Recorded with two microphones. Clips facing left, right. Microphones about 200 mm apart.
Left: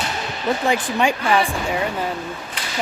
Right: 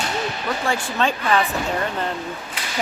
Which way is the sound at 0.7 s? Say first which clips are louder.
Left 2 dB; 15° left (ahead or behind).